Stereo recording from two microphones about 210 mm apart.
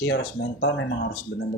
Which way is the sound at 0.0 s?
55° left (ahead or behind).